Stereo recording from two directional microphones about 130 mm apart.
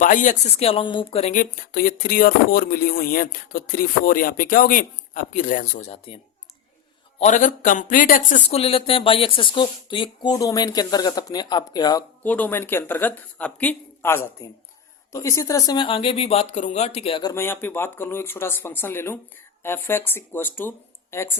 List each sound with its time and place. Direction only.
0.0 s a man's voice: 85° left
0.4 s speech: 50° left (ahead or behind)
1.2 s speech: 80° left
7.2 s a man's voice: 70° left (ahead or behind); by 8.4 s 90° left
8.4 s speech: 50° left (ahead or behind); by 12.0 s 30° left (ahead or behind)
12.2 s speech: 10° left (ahead or behind); by 17.2 s 50° left (ahead or behind)
17.2 s speech: 20° left (ahead or behind)